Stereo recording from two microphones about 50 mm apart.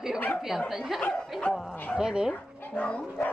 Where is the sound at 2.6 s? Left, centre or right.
Left.